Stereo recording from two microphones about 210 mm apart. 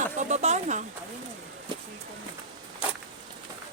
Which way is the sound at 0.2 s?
35° right (ahead or behind).